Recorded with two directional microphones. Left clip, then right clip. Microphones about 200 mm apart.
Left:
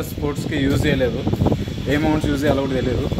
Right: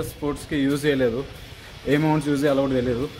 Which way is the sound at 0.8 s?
15° right (ahead or behind).